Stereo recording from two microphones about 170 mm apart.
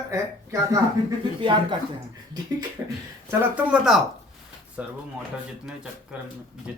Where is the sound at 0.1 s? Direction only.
20° right (ahead or behind).